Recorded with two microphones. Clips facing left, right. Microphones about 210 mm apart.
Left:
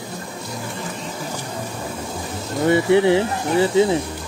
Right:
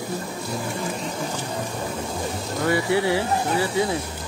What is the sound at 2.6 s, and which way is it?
Speech, 25° left (ahead or behind).